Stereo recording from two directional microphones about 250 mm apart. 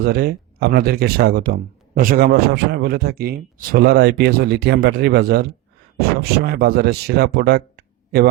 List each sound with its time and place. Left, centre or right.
0.0 s a man's voice: right